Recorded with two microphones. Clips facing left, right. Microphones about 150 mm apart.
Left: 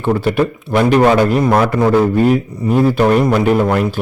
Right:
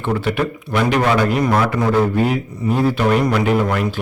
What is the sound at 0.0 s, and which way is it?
A man's voice, 40° left (ahead or behind).